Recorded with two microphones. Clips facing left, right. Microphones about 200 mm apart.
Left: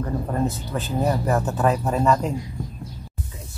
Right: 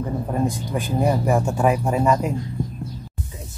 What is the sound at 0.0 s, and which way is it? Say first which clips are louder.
Speech: right 1 dB; 10° right (ahead or behind).